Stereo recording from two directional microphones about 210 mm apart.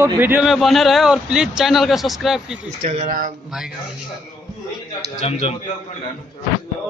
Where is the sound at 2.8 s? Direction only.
35° right (ahead or behind).